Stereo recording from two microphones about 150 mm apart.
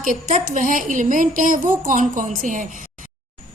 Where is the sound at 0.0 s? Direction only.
60° right (ahead or behind).